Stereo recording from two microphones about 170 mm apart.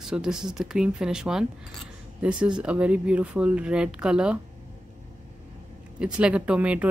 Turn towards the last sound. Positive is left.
turn(degrees=-5)  # may be behind; listen again after turning